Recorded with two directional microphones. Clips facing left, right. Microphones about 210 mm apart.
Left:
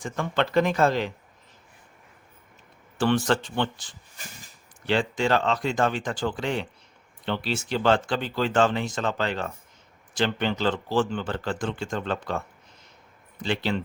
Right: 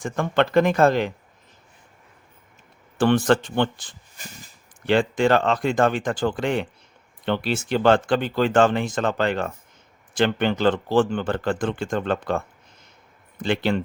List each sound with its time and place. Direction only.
0.0 s speech: 55° right (ahead or behind)
3.0 s speech: 50° right (ahead or behind)
13.4 s speech: 55° right (ahead or behind)